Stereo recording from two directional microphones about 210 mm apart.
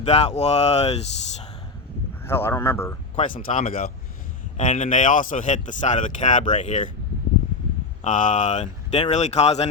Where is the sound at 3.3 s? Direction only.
35° left (ahead or behind).